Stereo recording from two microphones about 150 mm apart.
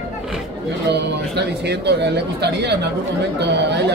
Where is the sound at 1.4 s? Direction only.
90° right.